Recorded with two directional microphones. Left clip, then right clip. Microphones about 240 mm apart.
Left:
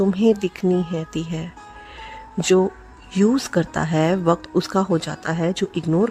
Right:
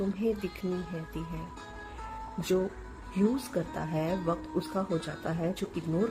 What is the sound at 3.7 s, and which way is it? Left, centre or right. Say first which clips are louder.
A woman's voice: left 14 dB; left.